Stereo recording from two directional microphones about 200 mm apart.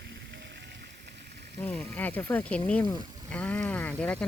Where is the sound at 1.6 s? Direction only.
10° left (ahead or behind).